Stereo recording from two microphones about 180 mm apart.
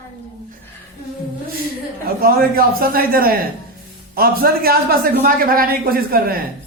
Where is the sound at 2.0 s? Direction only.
60° right (ahead or behind).